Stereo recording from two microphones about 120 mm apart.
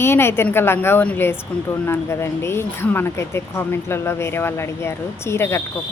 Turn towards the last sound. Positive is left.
turn(degrees=20)  # may be behind; listen again after turning